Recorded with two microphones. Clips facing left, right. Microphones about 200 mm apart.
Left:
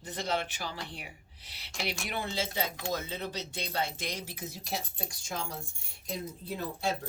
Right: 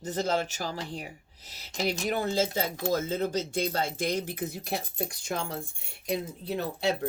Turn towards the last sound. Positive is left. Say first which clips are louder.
# right 5 dB
turn(degrees=-70)  # may be behind; listen again after turning